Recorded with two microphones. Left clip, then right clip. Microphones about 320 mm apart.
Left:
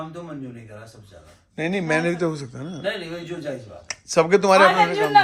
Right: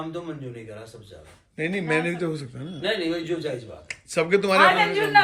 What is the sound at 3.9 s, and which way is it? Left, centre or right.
Speech, centre.